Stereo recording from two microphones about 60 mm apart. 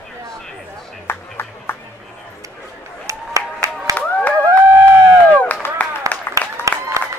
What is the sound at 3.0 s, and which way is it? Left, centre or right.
Applause, right.